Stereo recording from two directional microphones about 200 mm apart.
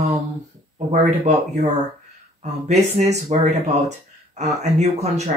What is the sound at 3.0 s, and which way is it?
Speech, 35° right (ahead or behind).